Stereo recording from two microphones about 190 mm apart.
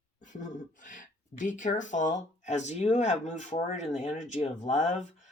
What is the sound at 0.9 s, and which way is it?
Speech, 40° left (ahead or behind).